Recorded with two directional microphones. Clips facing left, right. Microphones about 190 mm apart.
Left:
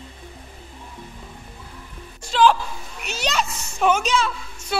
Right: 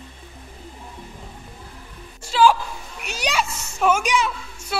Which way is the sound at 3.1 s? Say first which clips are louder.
Even; 10° right (ahead or behind).